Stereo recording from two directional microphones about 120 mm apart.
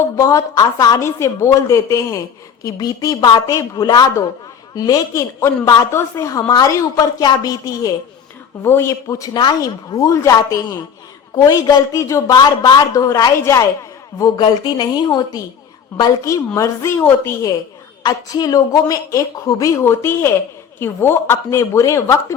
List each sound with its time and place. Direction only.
0.2 s a woman's voice: 30° left (ahead or behind)
18.0 s a woman's voice: 35° left (ahead or behind)